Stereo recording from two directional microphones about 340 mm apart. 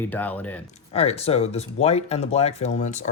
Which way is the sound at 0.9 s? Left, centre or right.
Centre.